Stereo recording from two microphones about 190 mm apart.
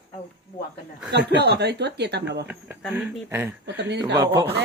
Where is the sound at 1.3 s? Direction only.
60° right (ahead or behind).